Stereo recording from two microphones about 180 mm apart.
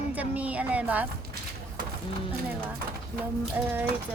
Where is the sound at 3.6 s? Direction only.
10° right (ahead or behind).